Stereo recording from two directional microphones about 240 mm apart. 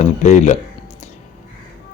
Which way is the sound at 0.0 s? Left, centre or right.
Left.